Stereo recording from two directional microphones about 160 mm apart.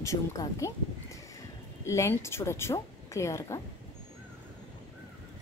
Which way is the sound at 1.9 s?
15° left (ahead or behind).